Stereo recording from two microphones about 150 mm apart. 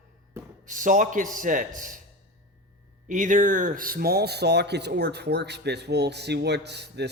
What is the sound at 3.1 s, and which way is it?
Speech, 60° right (ahead or behind).